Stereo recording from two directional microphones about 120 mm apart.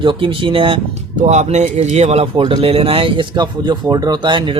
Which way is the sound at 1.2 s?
70° right (ahead or behind).